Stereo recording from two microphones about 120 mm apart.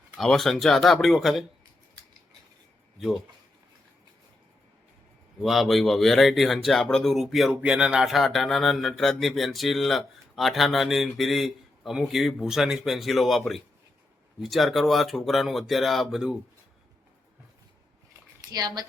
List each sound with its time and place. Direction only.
0.2 s speech: centre (ahead or behind)
3.0 s speech: centre (ahead or behind)
5.4 s speech: centre (ahead or behind)
18.4 s speech: 35° right (ahead or behind)